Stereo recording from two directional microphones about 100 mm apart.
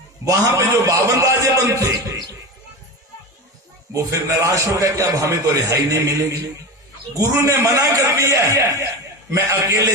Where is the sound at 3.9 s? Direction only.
30° right (ahead or behind).